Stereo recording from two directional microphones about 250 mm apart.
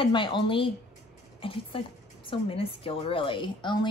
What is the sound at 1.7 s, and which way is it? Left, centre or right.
A woman's voice, left.